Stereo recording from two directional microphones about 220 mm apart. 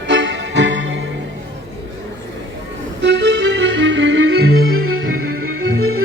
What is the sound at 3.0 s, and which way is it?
Music, 55° right (ahead or behind).